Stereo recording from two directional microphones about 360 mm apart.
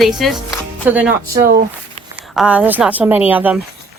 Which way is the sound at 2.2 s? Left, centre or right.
Centre.